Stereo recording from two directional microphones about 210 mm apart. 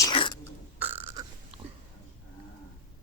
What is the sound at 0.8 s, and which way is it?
Burping, 10° right (ahead or behind).